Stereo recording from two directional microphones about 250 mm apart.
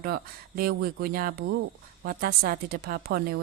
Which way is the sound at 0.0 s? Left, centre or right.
Right.